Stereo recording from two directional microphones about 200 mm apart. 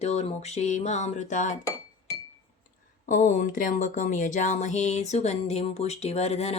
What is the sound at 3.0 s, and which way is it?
Speech, 40° left (ahead or behind).